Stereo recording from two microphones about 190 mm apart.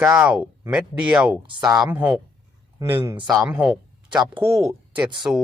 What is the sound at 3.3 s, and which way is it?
Speech, 5° right (ahead or behind).